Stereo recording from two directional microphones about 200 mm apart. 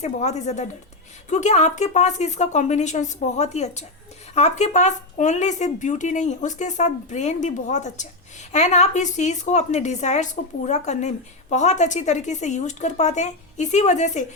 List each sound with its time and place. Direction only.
0.0 s a woman's voice: 35° left (ahead or behind)